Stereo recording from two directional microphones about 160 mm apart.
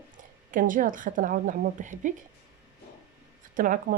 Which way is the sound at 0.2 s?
55° right (ahead or behind).